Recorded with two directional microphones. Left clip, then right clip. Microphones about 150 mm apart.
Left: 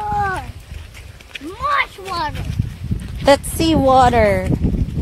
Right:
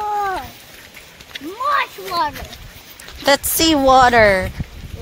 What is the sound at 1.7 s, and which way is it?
Speech, 25° left (ahead or behind).